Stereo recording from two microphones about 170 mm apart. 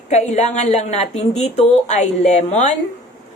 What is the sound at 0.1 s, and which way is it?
A woman's voice, 40° left (ahead or behind).